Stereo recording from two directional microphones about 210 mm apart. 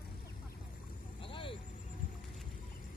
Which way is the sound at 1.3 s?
25° left (ahead or behind).